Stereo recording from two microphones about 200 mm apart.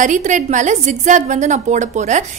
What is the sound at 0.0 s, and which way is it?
A woman's voice, 40° right (ahead or behind).